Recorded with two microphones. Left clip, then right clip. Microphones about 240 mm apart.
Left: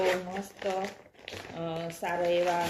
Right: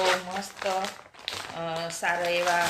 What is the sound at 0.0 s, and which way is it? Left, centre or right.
Speech, right.